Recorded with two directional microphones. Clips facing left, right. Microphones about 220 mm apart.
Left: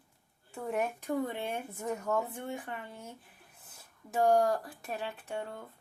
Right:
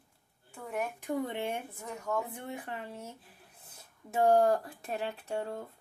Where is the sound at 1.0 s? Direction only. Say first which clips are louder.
Even; 20° right (ahead or behind).